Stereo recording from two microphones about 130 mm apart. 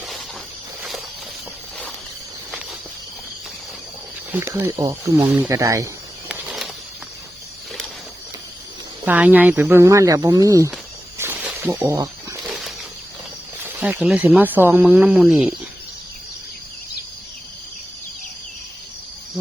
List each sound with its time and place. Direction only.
0.8 s walk: centre (ahead or behind)
4.3 s speech: 15° right (ahead or behind)
4.8 s speech: 25° right (ahead or behind)
6.2 s a sound: 5° right (ahead or behind)
9.0 s speech: 15° right (ahead or behind)
11.2 s snake: 15° right (ahead or behind)
11.6 s speech: 15° right (ahead or behind)
12.5 s a sound: 5° right (ahead or behind)
13.7 s speech: 10° right (ahead or behind)